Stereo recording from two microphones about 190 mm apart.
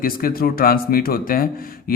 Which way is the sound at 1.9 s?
50° left (ahead or behind).